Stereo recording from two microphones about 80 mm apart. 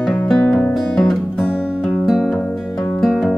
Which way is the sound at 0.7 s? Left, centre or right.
Centre.